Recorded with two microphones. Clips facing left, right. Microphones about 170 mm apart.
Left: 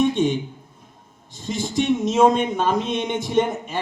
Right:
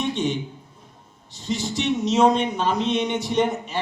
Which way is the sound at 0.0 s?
50° left (ahead or behind).